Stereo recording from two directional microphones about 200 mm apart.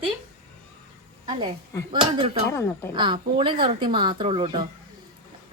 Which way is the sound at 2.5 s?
15° left (ahead or behind).